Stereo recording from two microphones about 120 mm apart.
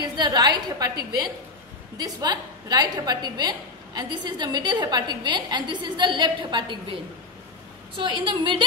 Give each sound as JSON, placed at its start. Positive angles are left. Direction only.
{"t": 0.0, "sound": "a woman's voice", "side_deg": -35}
{"t": 2.0, "sound": "a woman's voice", "side_deg": -30}